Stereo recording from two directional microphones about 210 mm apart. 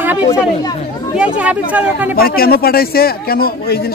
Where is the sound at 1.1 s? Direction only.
5° right (ahead or behind).